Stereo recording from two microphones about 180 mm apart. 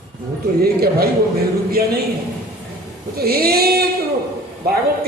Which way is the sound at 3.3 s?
60° right (ahead or behind).